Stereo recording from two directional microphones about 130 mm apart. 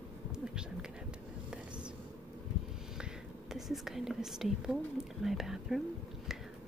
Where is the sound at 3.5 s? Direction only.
Centre (ahead or behind).